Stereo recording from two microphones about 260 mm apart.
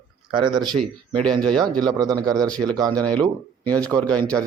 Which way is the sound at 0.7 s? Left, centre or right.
Centre.